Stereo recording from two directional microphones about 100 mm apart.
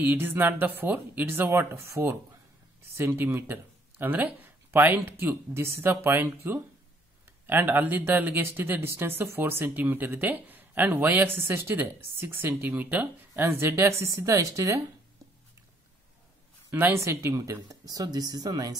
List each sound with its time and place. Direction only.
0.0 s speech: 20° right (ahead or behind)
16.7 s speech: 20° right (ahead or behind); by 18.8 s 40° right (ahead or behind)